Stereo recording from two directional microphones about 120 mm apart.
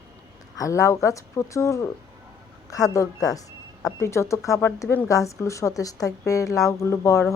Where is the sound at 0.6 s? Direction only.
25° left (ahead or behind).